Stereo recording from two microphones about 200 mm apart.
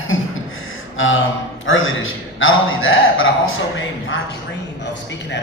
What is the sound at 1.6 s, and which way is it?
A man's voice, 75° left (ahead or behind).